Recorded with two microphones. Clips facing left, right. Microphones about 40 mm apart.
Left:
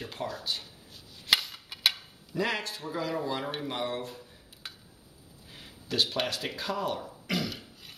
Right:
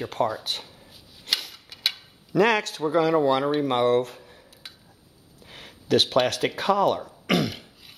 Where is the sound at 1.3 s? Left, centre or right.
Right.